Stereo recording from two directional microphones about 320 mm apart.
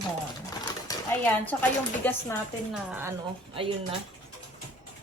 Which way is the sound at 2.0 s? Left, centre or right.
Centre.